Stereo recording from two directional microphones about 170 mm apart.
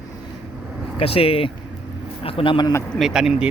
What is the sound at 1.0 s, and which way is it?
Speech, 35° left (ahead or behind).